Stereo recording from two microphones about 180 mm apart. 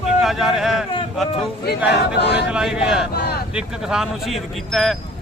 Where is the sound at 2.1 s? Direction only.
70° left (ahead or behind).